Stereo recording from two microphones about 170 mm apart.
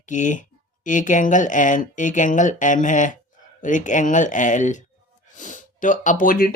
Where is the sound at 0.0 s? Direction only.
45° left (ahead or behind).